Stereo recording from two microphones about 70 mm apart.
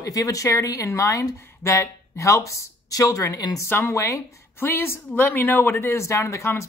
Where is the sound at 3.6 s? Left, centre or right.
Left.